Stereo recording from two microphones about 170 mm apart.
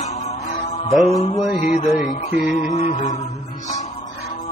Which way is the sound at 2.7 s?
45° left (ahead or behind).